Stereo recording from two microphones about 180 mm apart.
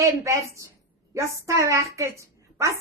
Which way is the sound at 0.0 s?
20° right (ahead or behind).